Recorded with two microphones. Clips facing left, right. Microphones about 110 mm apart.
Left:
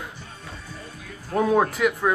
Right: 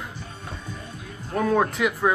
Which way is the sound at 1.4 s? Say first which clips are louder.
Left 2 dB; 15° left (ahead or behind).